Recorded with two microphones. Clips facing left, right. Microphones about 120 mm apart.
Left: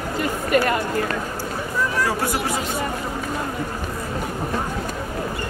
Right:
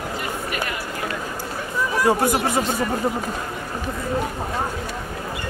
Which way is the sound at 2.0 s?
20° right (ahead or behind).